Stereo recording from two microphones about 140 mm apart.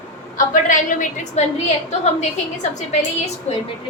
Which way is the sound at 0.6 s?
65° left (ahead or behind).